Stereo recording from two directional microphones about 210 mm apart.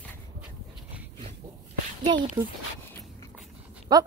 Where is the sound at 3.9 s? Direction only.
20° right (ahead or behind).